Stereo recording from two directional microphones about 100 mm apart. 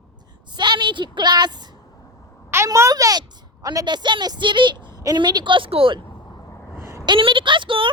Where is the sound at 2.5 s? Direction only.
30° right (ahead or behind).